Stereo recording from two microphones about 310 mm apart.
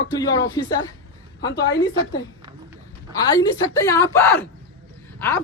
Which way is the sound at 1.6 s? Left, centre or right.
Left.